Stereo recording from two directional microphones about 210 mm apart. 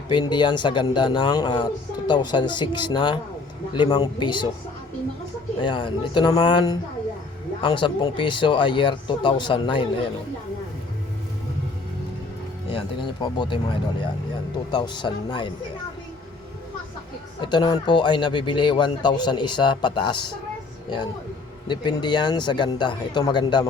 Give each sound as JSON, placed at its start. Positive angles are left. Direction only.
{"t": 0.1, "sound": "speech", "side_deg": 20}
{"t": 5.5, "sound": "speech", "side_deg": 25}
{"t": 12.7, "sound": "speech", "side_deg": 25}
{"t": 14.7, "sound": "speech", "side_deg": 20}
{"t": 17.4, "sound": "speech", "side_deg": 20}
{"t": 21.7, "sound": "speech", "side_deg": 20}